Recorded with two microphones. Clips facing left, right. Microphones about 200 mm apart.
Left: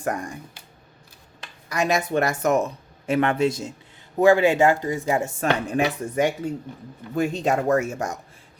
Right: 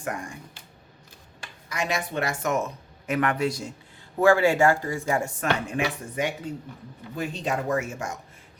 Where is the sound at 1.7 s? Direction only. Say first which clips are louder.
Left 6 dB; 40° left (ahead or behind); by 5.4 s 25° left (ahead or behind).